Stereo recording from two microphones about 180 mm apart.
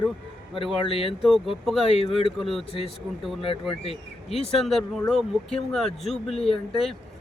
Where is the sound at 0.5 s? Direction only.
30° left (ahead or behind).